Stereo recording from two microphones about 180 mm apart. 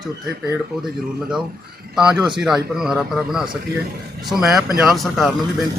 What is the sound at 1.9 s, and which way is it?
Speech, 5° right (ahead or behind).